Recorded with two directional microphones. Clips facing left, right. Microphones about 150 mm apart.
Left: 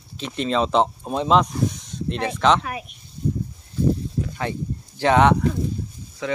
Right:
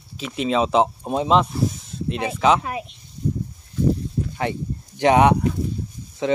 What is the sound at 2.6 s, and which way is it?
Speech, 25° right (ahead or behind).